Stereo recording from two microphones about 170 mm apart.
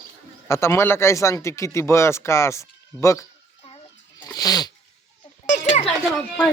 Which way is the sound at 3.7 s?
20° left (ahead or behind).